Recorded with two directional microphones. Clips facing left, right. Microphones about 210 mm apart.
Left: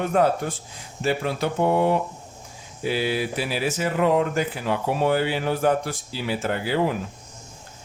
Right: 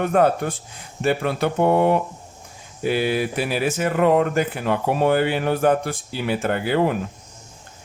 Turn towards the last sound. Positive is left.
turn(degrees=-55)  # may be behind; listen again after turning